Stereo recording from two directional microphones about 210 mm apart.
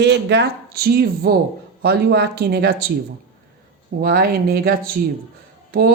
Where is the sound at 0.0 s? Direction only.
55° right (ahead or behind).